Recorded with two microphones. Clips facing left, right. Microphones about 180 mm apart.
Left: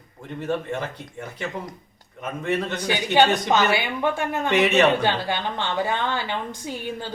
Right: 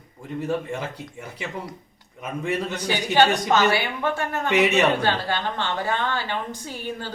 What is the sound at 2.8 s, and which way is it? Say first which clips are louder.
Speech: even; 15° left (ahead or behind).